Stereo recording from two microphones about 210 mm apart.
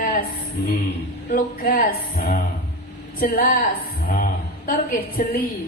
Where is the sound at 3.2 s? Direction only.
45° left (ahead or behind).